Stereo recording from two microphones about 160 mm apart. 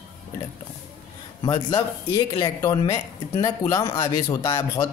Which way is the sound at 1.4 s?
25° left (ahead or behind).